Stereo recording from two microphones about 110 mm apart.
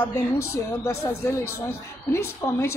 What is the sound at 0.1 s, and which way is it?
A woman's voice, 25° left (ahead or behind).